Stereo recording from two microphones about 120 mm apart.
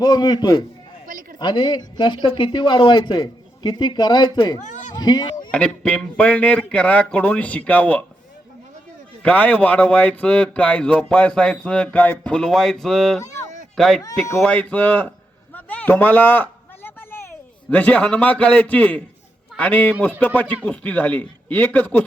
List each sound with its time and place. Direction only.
0.0 s speech: 35° left (ahead or behind)
4.6 s speech: 90° left
4.9 s speech: 35° left (ahead or behind)
5.5 s speech: 5° left (ahead or behind)
9.2 s speech: 10° left (ahead or behind)
15.5 s a sound: 15° left (ahead or behind)
19.5 s speech: 10° left (ahead or behind)